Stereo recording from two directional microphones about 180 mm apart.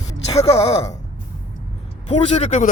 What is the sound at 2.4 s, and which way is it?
Speech, 40° left (ahead or behind).